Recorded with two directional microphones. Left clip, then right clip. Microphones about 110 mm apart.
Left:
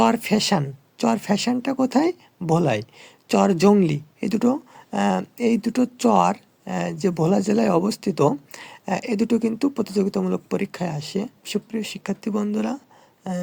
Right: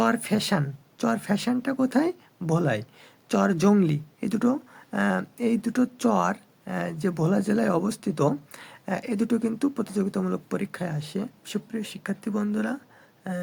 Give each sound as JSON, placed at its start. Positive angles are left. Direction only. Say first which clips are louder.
{"t": 0.0, "sound": "speech", "louder": "left 5 dB", "side_deg": 30}